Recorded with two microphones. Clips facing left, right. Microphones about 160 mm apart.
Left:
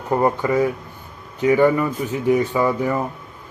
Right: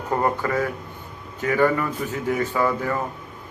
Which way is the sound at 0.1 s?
15° left (ahead or behind).